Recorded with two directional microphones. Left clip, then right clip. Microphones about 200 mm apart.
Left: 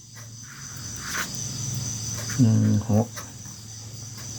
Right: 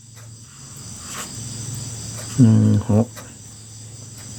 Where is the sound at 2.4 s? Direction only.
35° right (ahead or behind).